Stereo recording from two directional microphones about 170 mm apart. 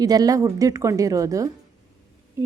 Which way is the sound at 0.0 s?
20° right (ahead or behind).